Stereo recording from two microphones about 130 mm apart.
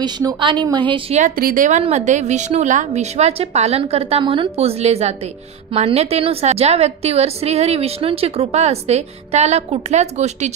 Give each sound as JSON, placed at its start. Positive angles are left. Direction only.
{"t": 0.0, "sound": "a woman's voice", "side_deg": -30}
{"t": 1.1, "sound": "a woman's voice", "side_deg": -85}